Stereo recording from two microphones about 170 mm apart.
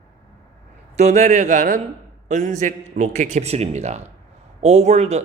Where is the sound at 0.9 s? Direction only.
40° right (ahead or behind).